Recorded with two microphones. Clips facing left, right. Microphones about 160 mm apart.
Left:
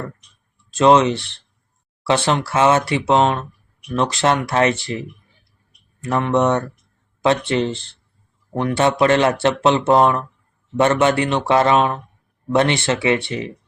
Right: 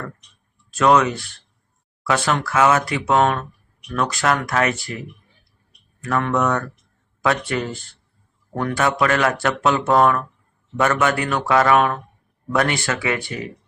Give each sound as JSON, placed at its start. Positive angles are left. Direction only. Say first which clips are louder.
{"t": 0.7, "sound": "speech", "louder": "left 3 dB", "side_deg": 25}